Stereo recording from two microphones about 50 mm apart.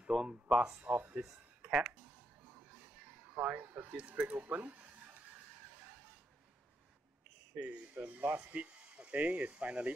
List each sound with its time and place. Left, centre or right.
0.1 s a sound: centre
0.6 s speech: right
1.2 s speech: centre
3.3 s speech: right
7.5 s speech: right
8.6 s speech: right